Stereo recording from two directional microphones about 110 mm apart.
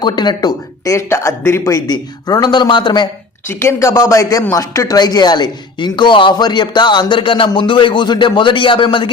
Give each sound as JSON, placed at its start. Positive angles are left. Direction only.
{"t": 0.0, "sound": "speech", "side_deg": 40}
{"t": 0.9, "sound": "speech", "side_deg": 25}
{"t": 1.9, "sound": "speech", "side_deg": 40}
{"t": 3.5, "sound": "speech", "side_deg": 25}